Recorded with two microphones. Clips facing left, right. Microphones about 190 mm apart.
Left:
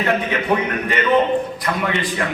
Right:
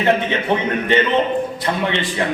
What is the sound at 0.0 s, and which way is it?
A man's voice, 25° right (ahead or behind).